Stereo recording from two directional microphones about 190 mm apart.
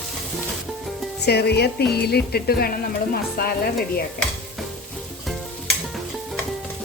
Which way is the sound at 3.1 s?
50° left (ahead or behind).